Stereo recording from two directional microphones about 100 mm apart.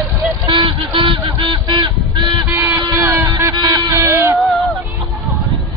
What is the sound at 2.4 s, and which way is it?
Honk, 25° right (ahead or behind).